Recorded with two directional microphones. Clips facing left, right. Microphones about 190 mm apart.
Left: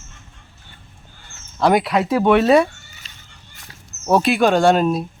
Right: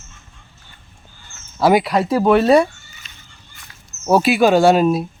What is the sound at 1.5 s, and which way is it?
A man's voice, 5° right (ahead or behind).